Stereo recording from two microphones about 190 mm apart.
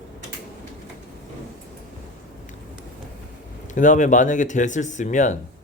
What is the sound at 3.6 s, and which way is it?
Speech, 40° left (ahead or behind).